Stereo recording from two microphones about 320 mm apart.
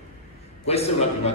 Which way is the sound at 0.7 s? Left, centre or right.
Centre.